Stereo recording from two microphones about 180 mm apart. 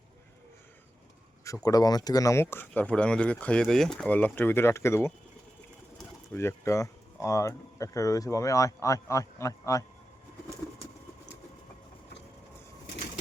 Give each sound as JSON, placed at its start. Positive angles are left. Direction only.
{"t": 1.6, "sound": "speech", "side_deg": 20}
{"t": 6.3, "sound": "speech", "side_deg": 15}